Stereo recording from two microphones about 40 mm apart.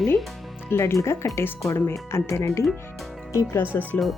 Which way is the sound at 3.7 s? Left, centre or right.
Left.